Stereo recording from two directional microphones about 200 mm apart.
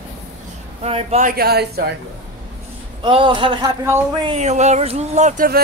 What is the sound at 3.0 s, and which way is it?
Speech, 25° right (ahead or behind).